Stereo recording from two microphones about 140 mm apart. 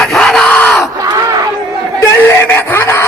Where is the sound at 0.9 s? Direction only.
25° right (ahead or behind).